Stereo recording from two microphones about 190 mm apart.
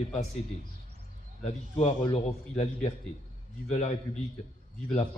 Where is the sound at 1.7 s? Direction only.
30° left (ahead or behind).